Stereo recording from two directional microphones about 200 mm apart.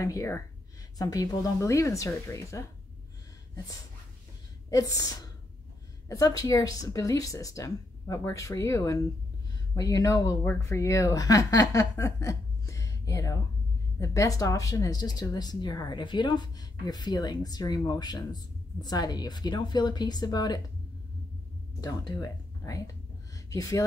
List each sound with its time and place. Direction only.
0.0 s a woman's voice: 15° left (ahead or behind)
4.6 s a woman's voice: 15° left (ahead or behind)
21.8 s speech: 20° left (ahead or behind)
23.3 s a sound: 15° left (ahead or behind)